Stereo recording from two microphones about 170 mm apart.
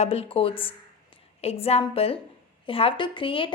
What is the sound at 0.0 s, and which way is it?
A woman's voice, 35° left (ahead or behind).